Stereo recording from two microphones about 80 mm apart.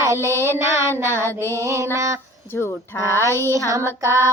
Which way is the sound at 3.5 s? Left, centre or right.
Right.